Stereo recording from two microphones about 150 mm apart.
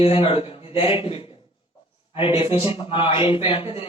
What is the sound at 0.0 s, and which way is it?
Speech, 40° left (ahead or behind).